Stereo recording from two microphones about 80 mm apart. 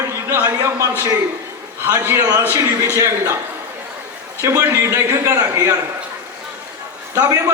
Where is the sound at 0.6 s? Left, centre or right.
Right.